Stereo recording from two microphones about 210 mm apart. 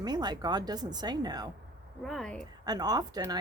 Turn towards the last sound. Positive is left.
turn(degrees=-20)  # may be behind; listen again after turning